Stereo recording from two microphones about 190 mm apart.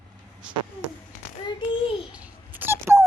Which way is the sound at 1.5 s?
25° left (ahead or behind).